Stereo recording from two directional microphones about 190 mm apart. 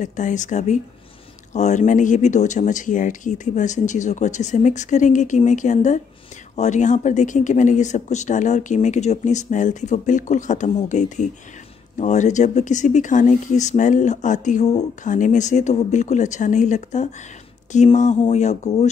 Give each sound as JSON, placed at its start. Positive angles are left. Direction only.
{"t": 0.0, "sound": "speech", "side_deg": 40}